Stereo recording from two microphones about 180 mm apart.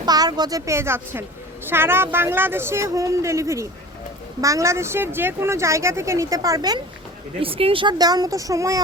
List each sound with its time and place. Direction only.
0.0 s speech: 20° right (ahead or behind)